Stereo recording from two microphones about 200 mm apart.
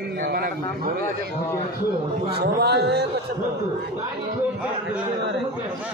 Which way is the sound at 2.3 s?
55° right (ahead or behind).